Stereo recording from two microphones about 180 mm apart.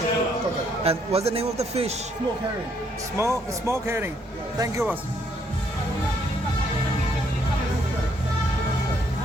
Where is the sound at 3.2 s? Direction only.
15° right (ahead or behind).